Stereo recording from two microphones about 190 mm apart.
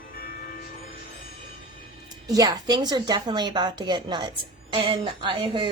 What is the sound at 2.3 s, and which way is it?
A woman's voice, 20° right (ahead or behind).